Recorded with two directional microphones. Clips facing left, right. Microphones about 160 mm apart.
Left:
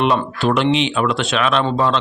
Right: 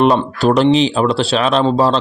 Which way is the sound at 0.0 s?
35° right (ahead or behind).